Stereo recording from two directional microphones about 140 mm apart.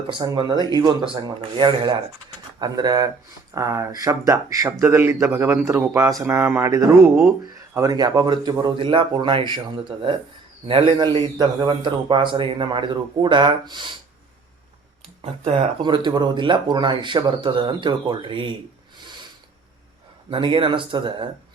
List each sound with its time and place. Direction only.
0.1 s speech: 35° right (ahead or behind)
10.7 s speech: 40° right (ahead or behind)
15.8 s speech: 30° right (ahead or behind)
20.3 s speech: 40° right (ahead or behind)